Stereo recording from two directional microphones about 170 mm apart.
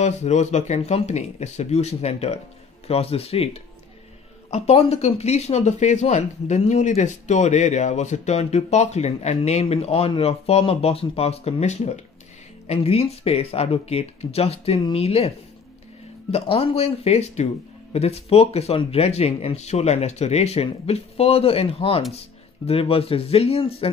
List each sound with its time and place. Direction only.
0.0 s speech: 40° left (ahead or behind)